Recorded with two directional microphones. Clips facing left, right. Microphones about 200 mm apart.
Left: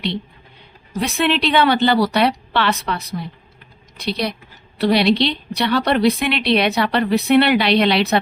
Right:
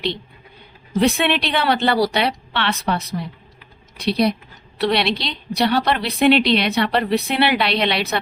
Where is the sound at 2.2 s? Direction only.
60° left (ahead or behind).